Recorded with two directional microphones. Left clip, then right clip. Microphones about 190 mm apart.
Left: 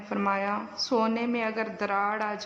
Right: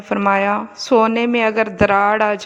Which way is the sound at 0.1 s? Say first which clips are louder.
Right 12 dB; 40° right (ahead or behind).